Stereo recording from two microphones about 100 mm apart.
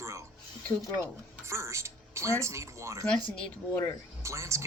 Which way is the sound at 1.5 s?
30° right (ahead or behind).